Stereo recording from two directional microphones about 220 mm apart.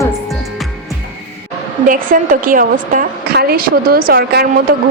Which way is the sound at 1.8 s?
40° right (ahead or behind).